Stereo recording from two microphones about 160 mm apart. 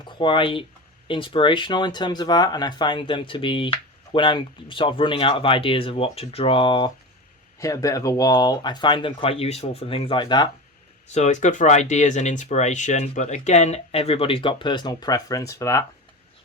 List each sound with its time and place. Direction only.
0.0 s speech: 30° left (ahead or behind)
7.6 s speech: 20° left (ahead or behind)
11.1 s speech: 45° left (ahead or behind); by 15.8 s 20° left (ahead or behind)